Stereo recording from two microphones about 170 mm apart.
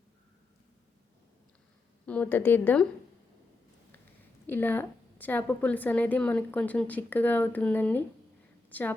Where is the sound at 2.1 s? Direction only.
10° left (ahead or behind).